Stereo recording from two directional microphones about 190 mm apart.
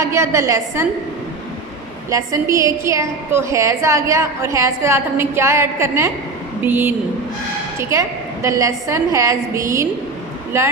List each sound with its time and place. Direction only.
0.0 s a woman's voice: 15° right (ahead or behind)
2.0 s a woman's voice: 15° right (ahead or behind)